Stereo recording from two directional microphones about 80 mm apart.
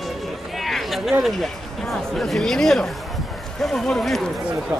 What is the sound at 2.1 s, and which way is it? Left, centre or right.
Speech, centre.